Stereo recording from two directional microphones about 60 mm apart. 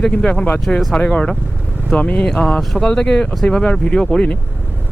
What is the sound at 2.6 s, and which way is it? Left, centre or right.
Speech, centre.